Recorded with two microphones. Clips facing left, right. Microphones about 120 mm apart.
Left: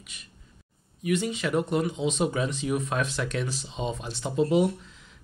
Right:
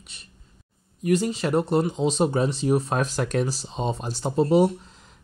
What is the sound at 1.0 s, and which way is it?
Speech, 40° right (ahead or behind).